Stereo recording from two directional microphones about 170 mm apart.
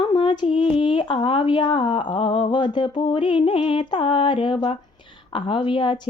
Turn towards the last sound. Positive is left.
turn(degrees=30)  # may be behind; listen again after turning